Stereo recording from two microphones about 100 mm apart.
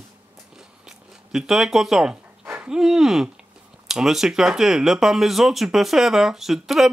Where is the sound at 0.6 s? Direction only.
5° right (ahead or behind).